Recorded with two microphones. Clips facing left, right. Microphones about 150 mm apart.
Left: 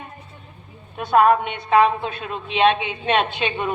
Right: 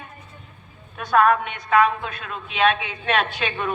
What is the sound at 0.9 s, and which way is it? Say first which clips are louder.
A woman's voice: left 2 dB; 30° left (ahead or behind).